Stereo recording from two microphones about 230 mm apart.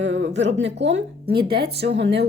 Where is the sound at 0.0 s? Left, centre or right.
Right.